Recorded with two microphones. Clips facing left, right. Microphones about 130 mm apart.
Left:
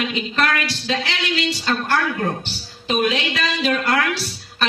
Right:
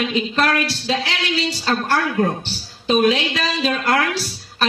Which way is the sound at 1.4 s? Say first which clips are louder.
Even; 35° right (ahead or behind).